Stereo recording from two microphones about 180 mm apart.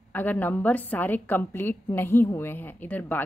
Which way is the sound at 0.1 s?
10° left (ahead or behind).